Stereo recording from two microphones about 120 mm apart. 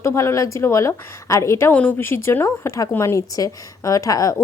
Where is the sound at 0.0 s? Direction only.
25° left (ahead or behind).